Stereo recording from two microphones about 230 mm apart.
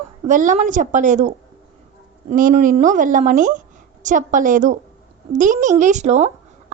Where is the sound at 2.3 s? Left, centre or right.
Right.